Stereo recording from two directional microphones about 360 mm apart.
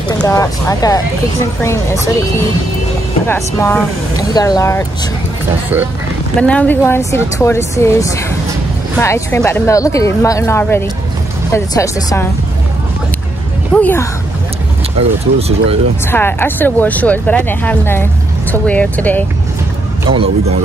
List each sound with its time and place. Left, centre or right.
0.2 s speech: centre
3.3 s speech: centre
6.4 s speech: centre
13.7 s speech: centre
15.0 s speech: centre
16.1 s speech: centre
20.1 s speech: centre